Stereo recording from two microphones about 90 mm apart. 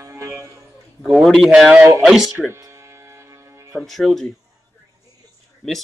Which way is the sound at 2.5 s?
35° right (ahead or behind).